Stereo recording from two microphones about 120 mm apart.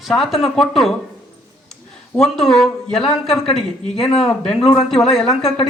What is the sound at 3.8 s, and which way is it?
Speech, 55° left (ahead or behind).